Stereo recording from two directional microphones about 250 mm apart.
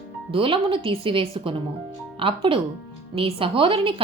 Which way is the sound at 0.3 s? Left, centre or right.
Right.